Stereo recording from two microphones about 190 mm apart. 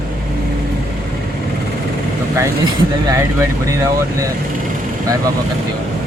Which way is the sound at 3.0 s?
15° right (ahead or behind).